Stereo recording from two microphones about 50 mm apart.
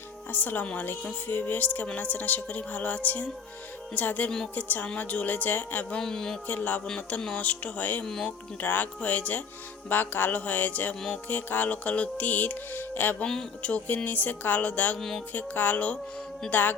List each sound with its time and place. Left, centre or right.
0.3 s music: left
0.6 s speech: left
1.3 s music: left
6.0 s music: centre
6.5 s music: left
8.0 s music: centre
8.6 s music: left
14.9 s music: centre
15.3 s music: left